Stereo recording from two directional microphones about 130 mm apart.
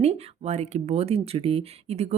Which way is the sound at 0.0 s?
55° right (ahead or behind).